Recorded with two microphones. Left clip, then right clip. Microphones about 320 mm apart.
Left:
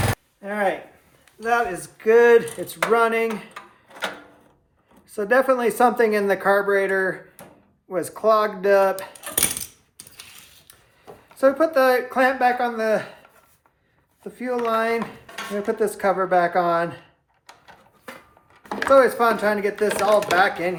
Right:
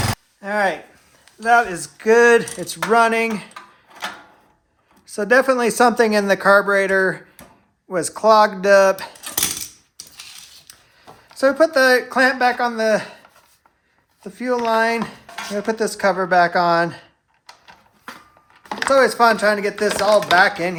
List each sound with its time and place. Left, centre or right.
0.4 s a sound: right
1.4 s speech: right
5.1 s speech: right
10.7 s speech: right
14.3 s speech: right
18.6 s speech: right